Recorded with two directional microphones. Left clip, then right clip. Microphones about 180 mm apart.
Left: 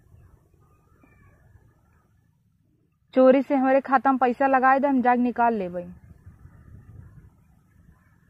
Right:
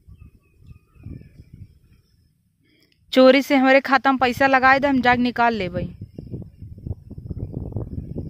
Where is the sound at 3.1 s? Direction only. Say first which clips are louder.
Right 4 dB; 20° right (ahead or behind).